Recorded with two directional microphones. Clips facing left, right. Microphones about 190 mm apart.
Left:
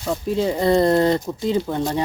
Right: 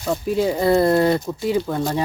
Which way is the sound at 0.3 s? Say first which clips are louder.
Right 1 dB; 10° right (ahead or behind).